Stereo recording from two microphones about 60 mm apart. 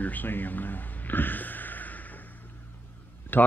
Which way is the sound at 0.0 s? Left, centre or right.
Left.